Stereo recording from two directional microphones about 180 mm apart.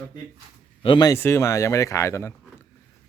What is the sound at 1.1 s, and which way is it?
Speech, 15° left (ahead or behind).